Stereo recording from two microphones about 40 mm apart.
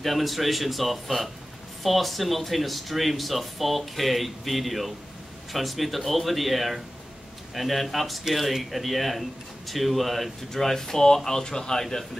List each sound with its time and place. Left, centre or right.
0.0 s speech: centre